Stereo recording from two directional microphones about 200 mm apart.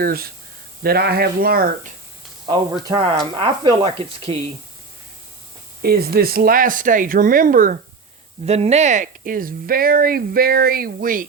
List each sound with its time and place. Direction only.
0.0 s speech: 50° right (ahead or behind)
2.8 s speech: 20° right (ahead or behind)
5.8 s speech: 50° right (ahead or behind)
8.4 s speech: 30° right (ahead or behind)